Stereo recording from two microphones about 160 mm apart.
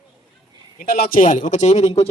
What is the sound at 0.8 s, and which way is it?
Speech, 65° left (ahead or behind).